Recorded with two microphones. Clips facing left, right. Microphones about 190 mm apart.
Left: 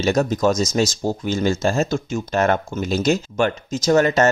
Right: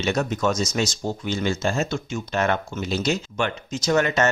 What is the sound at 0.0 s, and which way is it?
Speech, 40° left (ahead or behind).